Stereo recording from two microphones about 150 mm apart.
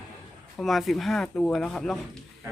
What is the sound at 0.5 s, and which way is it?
Speech, centre (ahead or behind).